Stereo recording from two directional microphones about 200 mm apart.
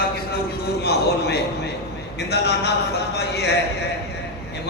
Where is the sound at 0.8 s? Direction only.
55° left (ahead or behind).